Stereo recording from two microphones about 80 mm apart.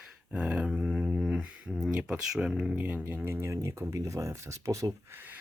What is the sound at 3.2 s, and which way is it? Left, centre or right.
Speech, right.